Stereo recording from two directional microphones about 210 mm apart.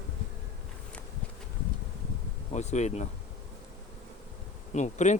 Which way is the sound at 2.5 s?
35° left (ahead or behind).